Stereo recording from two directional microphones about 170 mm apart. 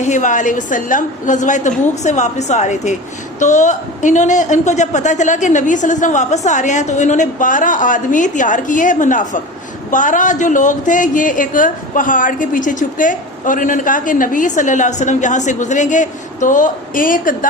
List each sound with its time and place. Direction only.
0.0 s a woman's voice: 45° left (ahead or behind)